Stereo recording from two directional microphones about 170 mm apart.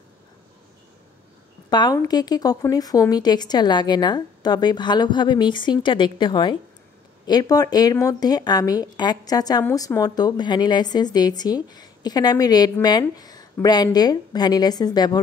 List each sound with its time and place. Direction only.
1.7 s speech: 25° left (ahead or behind)